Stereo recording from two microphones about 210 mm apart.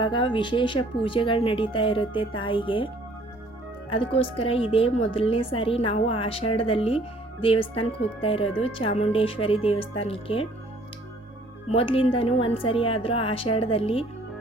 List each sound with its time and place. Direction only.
0.0 s speech: 20° left (ahead or behind)
11.7 s speech: 25° left (ahead or behind)